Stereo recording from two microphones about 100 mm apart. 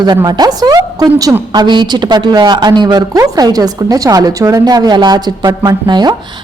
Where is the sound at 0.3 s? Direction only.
40° right (ahead or behind).